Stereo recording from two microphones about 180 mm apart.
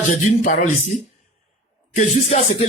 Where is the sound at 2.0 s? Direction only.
40° left (ahead or behind).